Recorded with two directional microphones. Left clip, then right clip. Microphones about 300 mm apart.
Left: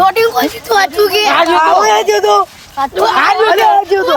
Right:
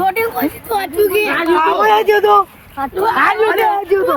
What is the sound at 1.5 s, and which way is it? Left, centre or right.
Speech, left.